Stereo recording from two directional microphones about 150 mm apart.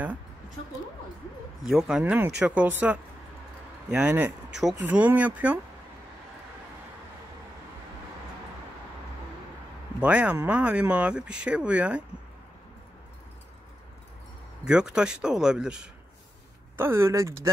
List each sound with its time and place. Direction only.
1.6 s speech: 5° right (ahead or behind)
9.9 s speech: 10° right (ahead or behind)
14.6 s speech: 5° right (ahead or behind)
16.7 s speech: 15° right (ahead or behind)